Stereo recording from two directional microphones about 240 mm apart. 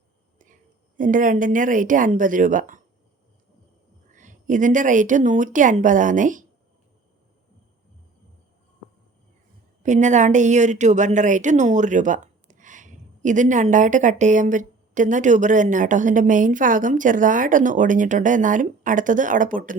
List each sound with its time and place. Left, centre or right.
0.9 s a woman's voice: right
4.1 s a woman's voice: right
9.8 s a woman's voice: right